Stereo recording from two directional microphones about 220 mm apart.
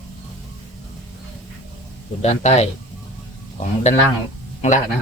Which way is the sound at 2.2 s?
30° left (ahead or behind).